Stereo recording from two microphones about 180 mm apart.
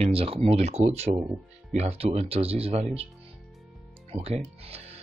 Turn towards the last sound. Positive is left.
turn(degrees=-35)  # may be behind; listen again after turning